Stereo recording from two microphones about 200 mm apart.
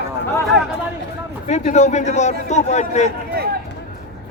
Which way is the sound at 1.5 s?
35° left (ahead or behind).